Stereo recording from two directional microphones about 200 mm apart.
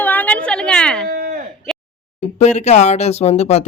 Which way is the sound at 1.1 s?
50° right (ahead or behind).